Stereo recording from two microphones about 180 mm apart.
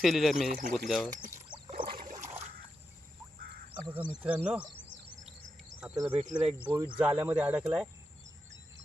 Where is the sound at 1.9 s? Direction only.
50° right (ahead or behind).